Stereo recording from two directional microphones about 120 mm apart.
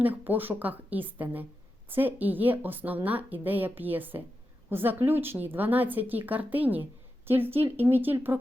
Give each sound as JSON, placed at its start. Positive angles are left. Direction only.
{"t": 0.0, "sound": "a woman's voice", "side_deg": -15}